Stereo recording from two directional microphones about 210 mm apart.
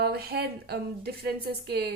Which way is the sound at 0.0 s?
50° right (ahead or behind).